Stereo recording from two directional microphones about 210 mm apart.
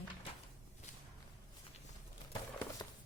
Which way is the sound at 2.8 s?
15° left (ahead or behind).